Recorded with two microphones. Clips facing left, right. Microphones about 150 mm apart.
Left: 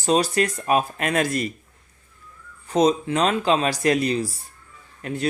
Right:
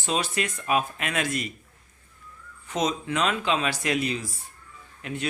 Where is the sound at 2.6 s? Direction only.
35° left (ahead or behind).